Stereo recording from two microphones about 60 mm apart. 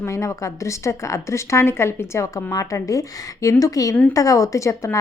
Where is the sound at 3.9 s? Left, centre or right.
Left.